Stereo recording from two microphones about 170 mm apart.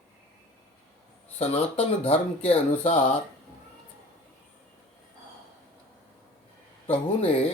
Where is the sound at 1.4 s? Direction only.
35° left (ahead or behind).